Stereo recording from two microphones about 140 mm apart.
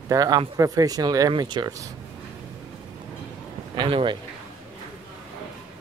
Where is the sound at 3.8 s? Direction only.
35° right (ahead or behind).